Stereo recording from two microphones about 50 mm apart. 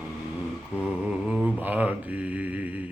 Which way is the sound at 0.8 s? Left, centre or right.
Right.